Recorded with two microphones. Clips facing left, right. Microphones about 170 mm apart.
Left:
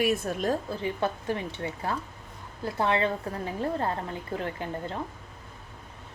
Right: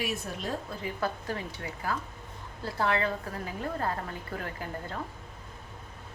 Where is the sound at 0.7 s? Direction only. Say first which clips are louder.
Left 4 dB; 30° left (ahead or behind).